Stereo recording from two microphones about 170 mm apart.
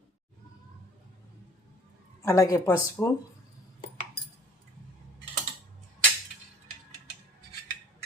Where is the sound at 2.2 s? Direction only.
20° left (ahead or behind).